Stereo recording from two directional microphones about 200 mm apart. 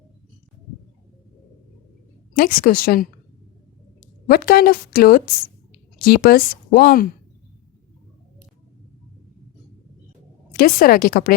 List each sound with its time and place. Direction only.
2.3 s speech: 45° left (ahead or behind)
4.3 s speech: 50° left (ahead or behind)
10.6 s speech: 45° left (ahead or behind)